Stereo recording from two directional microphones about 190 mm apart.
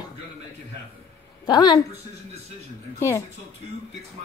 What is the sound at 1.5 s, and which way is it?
Speech, 20° left (ahead or behind).